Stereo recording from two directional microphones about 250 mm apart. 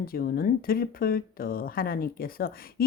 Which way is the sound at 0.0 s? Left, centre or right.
Left.